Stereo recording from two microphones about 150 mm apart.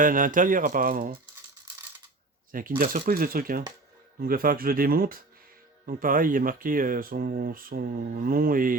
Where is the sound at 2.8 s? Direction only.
70° right (ahead or behind).